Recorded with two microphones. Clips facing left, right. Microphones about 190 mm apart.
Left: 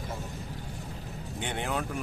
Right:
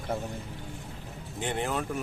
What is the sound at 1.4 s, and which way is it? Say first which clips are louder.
Speech: right 2 dB; centre (ahead or behind).